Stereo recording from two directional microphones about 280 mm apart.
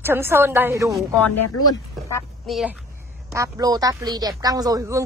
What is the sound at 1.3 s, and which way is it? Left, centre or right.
Speech, left.